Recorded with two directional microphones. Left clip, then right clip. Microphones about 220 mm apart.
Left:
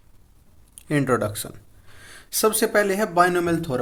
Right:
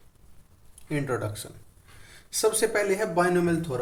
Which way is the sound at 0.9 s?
45° left (ahead or behind).